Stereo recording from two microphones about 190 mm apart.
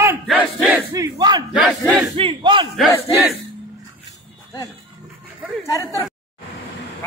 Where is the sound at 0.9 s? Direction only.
20° right (ahead or behind).